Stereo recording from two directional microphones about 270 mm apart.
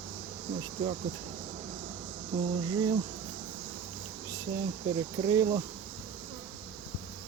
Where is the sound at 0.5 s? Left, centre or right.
Centre.